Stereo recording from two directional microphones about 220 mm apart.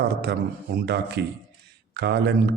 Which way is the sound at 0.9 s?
50° right (ahead or behind).